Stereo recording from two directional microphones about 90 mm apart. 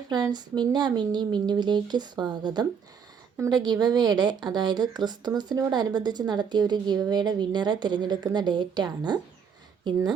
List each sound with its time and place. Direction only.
0.1 s a woman's voice: 50° right (ahead or behind)